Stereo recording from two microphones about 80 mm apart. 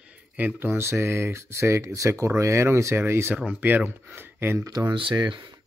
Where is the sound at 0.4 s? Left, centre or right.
Right.